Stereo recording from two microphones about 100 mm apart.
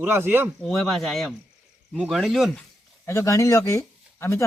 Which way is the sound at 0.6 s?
Centre (ahead or behind).